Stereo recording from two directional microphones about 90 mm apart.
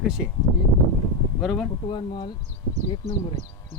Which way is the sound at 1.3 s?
Centre (ahead or behind).